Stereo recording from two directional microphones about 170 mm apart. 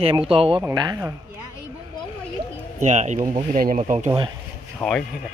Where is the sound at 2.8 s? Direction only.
45° right (ahead or behind).